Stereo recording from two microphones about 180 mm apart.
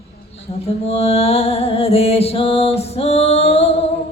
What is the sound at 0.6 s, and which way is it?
Music, 35° left (ahead or behind).